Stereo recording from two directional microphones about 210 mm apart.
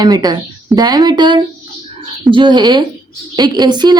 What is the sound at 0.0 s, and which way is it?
Speech, 20° right (ahead or behind).